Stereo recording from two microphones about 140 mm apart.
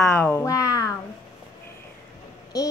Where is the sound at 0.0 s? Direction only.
15° left (ahead or behind).